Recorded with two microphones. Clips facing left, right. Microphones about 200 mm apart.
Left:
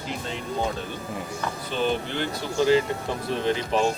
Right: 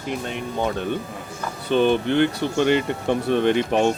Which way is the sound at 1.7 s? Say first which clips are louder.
Right 9 dB; 60° right (ahead or behind).